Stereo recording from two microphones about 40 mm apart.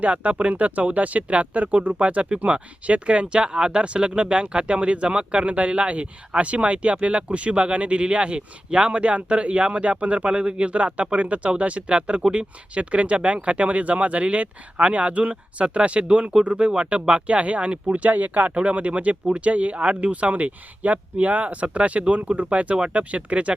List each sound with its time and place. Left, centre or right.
0.0 s speech: right